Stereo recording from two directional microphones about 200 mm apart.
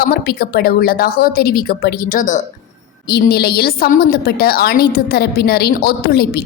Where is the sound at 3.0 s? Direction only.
55° left (ahead or behind).